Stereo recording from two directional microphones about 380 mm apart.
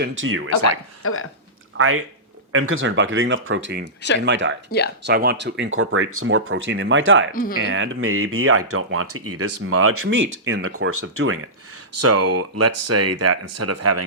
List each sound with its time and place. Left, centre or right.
0.0 s speech: right
0.6 s speech: left
1.7 s speech: right
4.7 s speech: left
5.0 s speech: right
7.3 s speech: left
7.7 s speech: right